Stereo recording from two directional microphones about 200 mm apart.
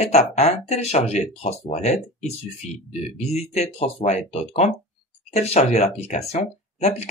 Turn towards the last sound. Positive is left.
turn(degrees=35)  # may be behind; listen again after turning